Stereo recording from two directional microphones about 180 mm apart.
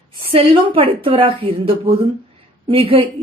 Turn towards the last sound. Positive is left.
turn(degrees=-30)  # may be behind; listen again after turning